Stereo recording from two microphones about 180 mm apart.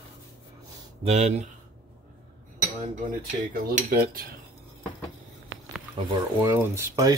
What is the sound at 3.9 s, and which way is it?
Cutlery, 55° right (ahead or behind).